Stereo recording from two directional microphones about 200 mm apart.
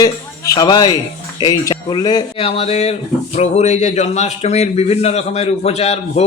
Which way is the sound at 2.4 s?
30° left (ahead or behind).